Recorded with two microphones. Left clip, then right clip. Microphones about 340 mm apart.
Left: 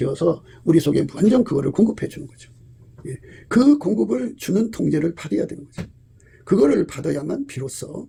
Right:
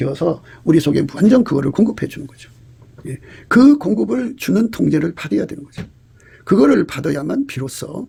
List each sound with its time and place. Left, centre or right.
0.7 s speech: right
3.5 s speech: right